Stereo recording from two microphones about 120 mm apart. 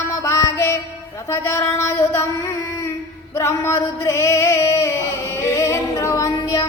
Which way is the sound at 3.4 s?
25° left (ahead or behind).